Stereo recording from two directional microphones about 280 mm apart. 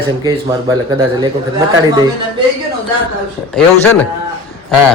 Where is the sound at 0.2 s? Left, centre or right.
Centre.